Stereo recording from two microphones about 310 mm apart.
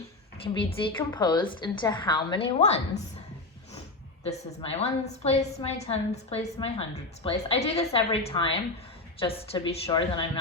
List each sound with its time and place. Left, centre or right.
0.4 s a woman's voice: centre
4.2 s a woman's voice: centre